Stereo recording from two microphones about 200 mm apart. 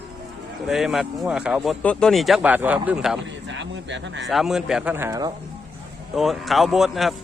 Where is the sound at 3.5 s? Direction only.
65° right (ahead or behind).